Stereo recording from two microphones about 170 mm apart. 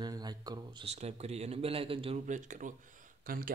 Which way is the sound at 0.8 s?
40° right (ahead or behind).